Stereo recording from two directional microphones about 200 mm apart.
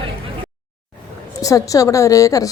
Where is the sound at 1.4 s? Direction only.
15° left (ahead or behind).